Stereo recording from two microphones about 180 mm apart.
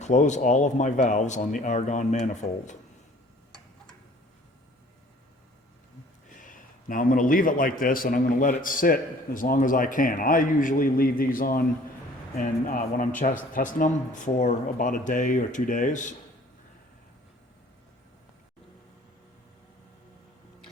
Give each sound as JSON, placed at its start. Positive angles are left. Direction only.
{"t": 0.0, "sound": "speech", "side_deg": 40}
{"t": 6.2, "sound": "a man's voice", "side_deg": 45}